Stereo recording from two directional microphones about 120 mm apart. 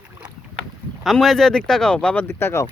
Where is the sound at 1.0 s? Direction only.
Centre (ahead or behind).